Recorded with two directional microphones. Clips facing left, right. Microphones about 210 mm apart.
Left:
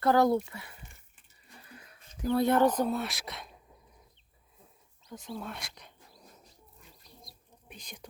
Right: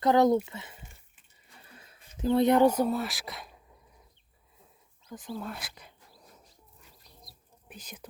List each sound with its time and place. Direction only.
0.0 s speech: 20° right (ahead or behind); by 3.5 s centre (ahead or behind)
5.0 s speech: centre (ahead or behind)
7.3 s whispering: 5° right (ahead or behind)